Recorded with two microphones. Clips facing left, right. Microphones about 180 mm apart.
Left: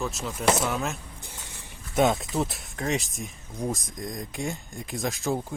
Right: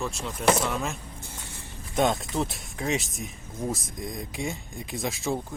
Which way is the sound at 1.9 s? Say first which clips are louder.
Left 2 dB; 5° left (ahead or behind).